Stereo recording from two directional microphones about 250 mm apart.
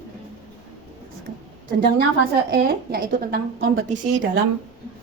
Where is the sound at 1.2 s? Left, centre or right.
Right.